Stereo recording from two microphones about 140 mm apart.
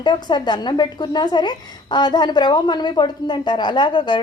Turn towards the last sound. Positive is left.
turn(degrees=35)  # may be behind; listen again after turning